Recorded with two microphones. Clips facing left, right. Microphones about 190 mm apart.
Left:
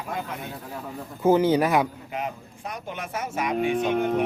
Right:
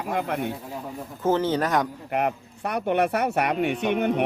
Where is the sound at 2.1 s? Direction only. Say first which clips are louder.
Right 6 dB; 65° right (ahead or behind).